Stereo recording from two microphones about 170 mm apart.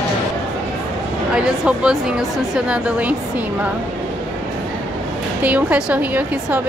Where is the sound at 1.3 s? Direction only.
5° right (ahead or behind).